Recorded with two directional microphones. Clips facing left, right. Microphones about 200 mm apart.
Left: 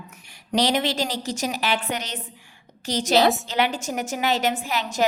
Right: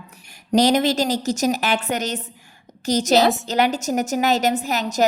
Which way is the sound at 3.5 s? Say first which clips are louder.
Right 4 dB; 40° right (ahead or behind).